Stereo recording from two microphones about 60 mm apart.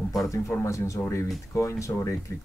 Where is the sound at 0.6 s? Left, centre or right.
Left.